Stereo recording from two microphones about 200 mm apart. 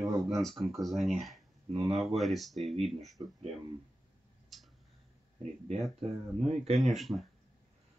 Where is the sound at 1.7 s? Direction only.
30° right (ahead or behind).